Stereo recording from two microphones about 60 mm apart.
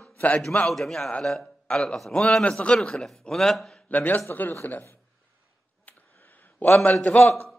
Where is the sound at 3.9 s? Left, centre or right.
Left.